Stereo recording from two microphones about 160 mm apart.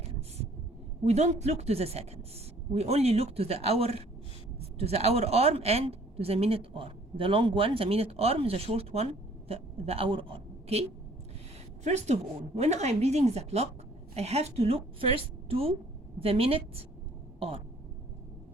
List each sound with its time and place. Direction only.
1.0 s a woman's voice: 45° right (ahead or behind)